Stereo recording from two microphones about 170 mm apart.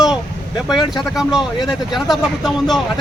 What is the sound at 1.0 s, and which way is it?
Speech, centre (ahead or behind).